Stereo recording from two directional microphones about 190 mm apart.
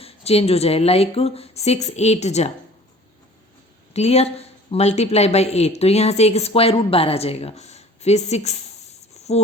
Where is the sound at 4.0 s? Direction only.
35° left (ahead or behind).